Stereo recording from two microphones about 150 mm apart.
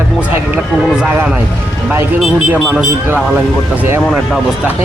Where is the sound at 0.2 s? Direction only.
10° right (ahead or behind).